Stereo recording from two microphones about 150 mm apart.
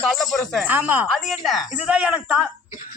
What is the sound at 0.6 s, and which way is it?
Speech, 10° right (ahead or behind).